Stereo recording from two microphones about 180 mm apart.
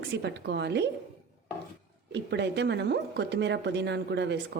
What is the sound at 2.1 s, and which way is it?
Speech, 70° right (ahead or behind).